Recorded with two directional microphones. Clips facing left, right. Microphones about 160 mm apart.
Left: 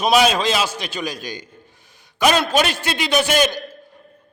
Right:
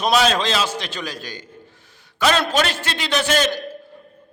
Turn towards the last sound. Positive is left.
turn(degrees=15)  # may be behind; listen again after turning